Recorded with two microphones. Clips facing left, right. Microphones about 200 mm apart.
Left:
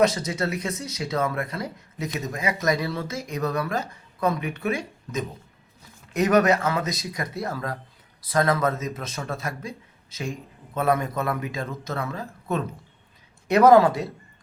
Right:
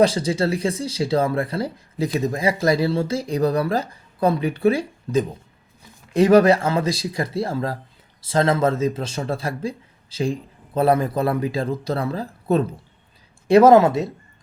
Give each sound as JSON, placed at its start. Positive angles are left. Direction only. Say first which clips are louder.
{"t": 0.0, "sound": "speech", "louder": "right 4 dB", "side_deg": -30}